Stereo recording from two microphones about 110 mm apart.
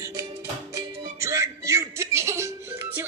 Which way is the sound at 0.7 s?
25° right (ahead or behind).